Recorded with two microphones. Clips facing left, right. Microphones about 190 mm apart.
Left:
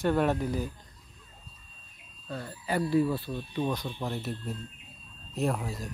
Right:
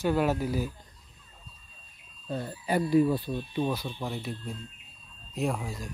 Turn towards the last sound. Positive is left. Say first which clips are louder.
# left 1 dB
turn(degrees=0)  # may be behind; listen again after turning